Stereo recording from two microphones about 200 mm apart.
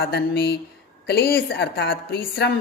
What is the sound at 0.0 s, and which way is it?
A man's voice, 55° left (ahead or behind).